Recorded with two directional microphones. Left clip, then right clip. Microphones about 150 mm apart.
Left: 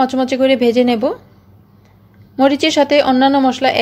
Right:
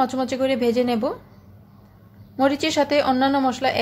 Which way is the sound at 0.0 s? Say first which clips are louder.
Left 7 dB; 30° left (ahead or behind).